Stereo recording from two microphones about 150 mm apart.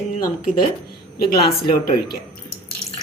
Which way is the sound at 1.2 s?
85° left.